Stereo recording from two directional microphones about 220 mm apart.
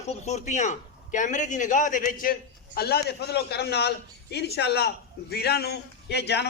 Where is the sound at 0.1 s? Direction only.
30° left (ahead or behind).